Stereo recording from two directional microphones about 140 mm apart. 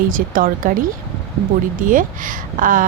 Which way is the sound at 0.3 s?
80° right.